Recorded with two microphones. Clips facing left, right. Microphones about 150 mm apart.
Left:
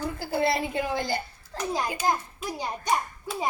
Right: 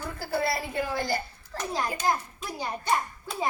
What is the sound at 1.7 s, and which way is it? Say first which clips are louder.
A child's voice: left 1 dB; 15° left (ahead or behind).